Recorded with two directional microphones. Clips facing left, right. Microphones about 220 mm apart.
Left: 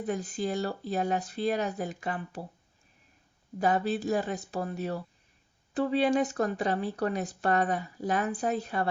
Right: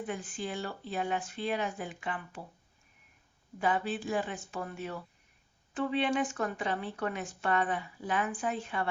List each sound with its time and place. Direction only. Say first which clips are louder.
0.0 s speech: left 6 dB; 40° left (ahead or behind)
3.6 s speech: left 4 dB; 40° left (ahead or behind)